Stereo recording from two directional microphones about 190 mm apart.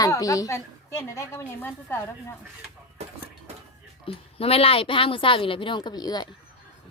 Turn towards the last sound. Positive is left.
turn(degrees=20)  # may be behind; listen again after turning